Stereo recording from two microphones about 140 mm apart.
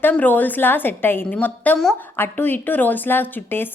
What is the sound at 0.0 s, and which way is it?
A woman's voice, 10° left (ahead or behind).